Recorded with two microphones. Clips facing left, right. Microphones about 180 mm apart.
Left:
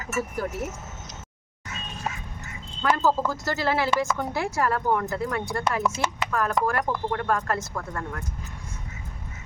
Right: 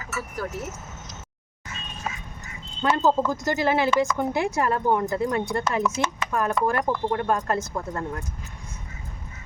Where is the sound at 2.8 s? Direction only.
20° right (ahead or behind).